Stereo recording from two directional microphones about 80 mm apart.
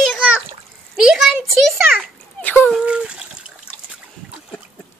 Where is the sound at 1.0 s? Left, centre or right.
Centre.